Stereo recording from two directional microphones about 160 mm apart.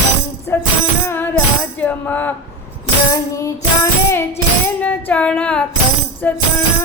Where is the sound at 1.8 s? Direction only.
10° left (ahead or behind).